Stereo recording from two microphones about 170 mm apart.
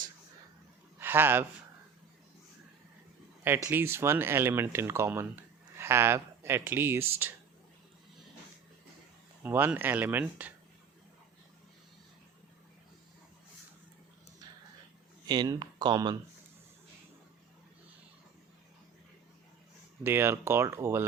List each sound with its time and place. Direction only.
0.9 s speech: 10° right (ahead or behind)
3.4 s speech: 15° right (ahead or behind)
9.4 s speech: 10° right (ahead or behind)
15.3 s speech: 25° right (ahead or behind)
20.1 s speech: 15° right (ahead or behind)